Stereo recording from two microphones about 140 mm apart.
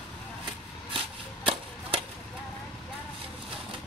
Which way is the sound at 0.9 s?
40° right (ahead or behind).